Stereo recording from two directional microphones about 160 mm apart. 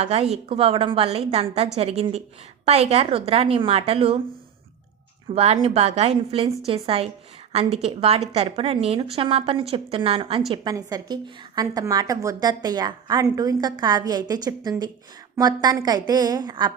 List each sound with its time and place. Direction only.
0.0 s a woman's voice: 40° right (ahead or behind)
5.3 s a woman's voice: 40° right (ahead or behind)
10.5 s a woman's voice: 25° right (ahead or behind)